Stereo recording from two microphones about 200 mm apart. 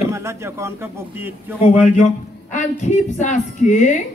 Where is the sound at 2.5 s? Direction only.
35° left (ahead or behind).